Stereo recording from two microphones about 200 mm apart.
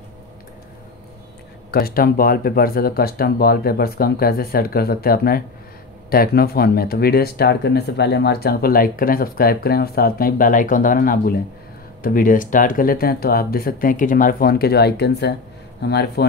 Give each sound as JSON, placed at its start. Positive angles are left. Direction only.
{"t": 1.7, "sound": "speech", "side_deg": 50}